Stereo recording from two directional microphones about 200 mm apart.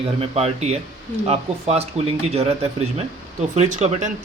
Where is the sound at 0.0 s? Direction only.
30° right (ahead or behind).